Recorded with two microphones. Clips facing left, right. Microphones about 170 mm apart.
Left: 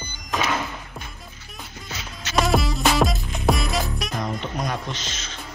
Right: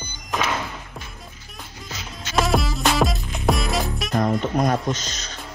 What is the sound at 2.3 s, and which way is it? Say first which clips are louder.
Music: even; centre (ahead or behind).